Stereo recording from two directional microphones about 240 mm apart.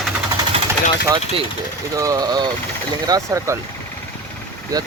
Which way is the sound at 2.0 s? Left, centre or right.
Centre.